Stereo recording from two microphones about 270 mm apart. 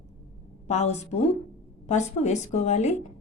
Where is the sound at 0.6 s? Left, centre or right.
Left.